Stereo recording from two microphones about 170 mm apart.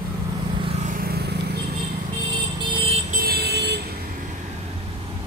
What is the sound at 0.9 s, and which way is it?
Vehicle, 60° right (ahead or behind).